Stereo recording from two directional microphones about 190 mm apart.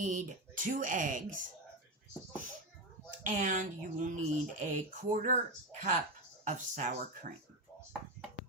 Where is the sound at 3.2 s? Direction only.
45° right (ahead or behind).